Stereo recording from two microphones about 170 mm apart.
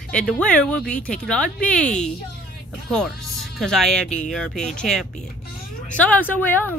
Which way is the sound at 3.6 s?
5° left (ahead or behind).